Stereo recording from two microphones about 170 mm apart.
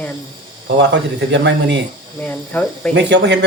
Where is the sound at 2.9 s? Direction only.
90° right.